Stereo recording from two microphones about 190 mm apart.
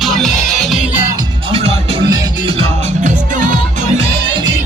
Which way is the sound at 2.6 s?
40° right (ahead or behind).